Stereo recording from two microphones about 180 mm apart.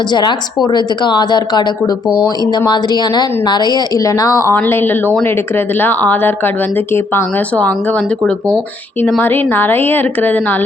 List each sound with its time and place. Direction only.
0.1 s a woman's voice: 25° left (ahead or behind)